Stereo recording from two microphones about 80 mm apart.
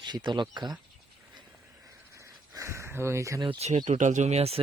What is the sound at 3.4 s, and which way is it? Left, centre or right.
Speech, right.